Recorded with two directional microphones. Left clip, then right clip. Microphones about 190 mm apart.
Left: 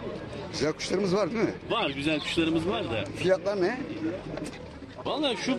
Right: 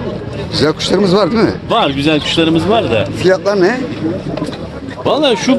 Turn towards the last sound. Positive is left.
turn(degrees=-35)  # may be behind; listen again after turning